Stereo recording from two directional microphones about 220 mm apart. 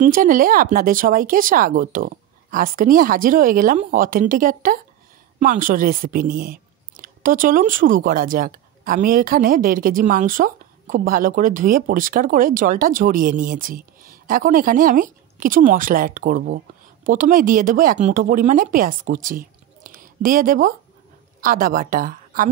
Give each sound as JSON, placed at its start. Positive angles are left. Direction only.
{"t": 0.0, "sound": "a woman's voice", "side_deg": -40}